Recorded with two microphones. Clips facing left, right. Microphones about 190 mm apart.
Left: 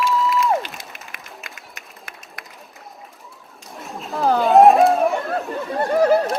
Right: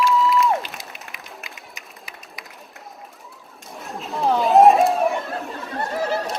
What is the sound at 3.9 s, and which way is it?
Chatter, centre (ahead or behind).